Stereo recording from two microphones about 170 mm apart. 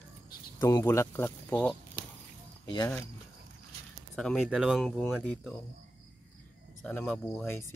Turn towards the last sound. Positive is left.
turn(degrees=15)  # may be behind; listen again after turning